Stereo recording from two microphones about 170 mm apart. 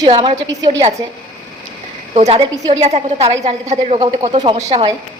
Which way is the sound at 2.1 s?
35° right (ahead or behind).